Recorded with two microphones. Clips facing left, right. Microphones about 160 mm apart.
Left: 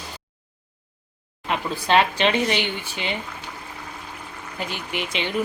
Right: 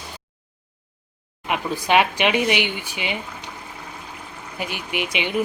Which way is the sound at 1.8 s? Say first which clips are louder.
Even; 15° right (ahead or behind).